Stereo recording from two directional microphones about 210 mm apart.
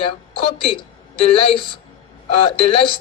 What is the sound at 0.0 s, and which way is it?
A woman's voice, 25° left (ahead or behind).